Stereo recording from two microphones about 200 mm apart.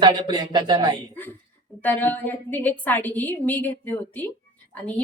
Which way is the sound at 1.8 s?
10° left (ahead or behind).